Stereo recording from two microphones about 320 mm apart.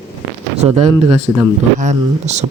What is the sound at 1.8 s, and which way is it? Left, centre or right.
Speech, right.